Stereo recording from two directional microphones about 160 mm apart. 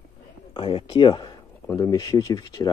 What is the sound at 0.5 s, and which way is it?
Speech, 30° left (ahead or behind).